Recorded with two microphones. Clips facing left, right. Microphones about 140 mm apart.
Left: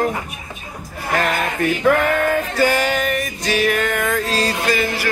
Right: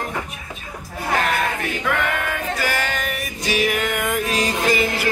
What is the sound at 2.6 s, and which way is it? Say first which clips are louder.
Music: left 8 dB; 25° left (ahead or behind).